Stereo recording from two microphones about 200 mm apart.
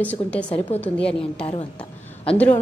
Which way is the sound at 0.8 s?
5° left (ahead or behind).